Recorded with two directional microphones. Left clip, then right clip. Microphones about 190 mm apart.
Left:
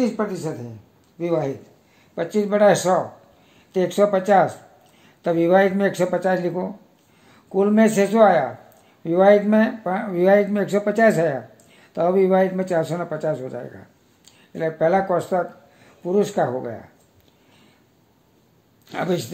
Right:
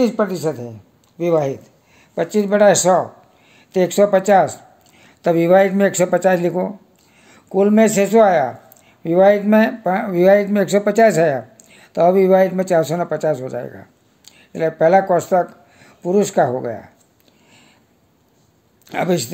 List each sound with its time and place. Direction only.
0.0 s a woman's voice: 55° right (ahead or behind)
18.9 s speech: 40° right (ahead or behind)